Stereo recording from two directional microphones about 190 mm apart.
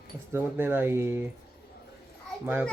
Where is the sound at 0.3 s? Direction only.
10° right (ahead or behind).